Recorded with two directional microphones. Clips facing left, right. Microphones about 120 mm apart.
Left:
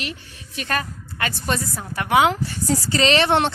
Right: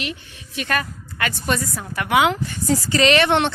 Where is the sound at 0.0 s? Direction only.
40° left (ahead or behind).